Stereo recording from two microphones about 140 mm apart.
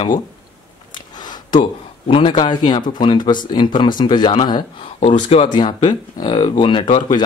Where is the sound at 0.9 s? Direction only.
30° left (ahead or behind).